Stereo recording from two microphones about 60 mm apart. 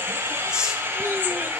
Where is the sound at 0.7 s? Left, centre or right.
Right.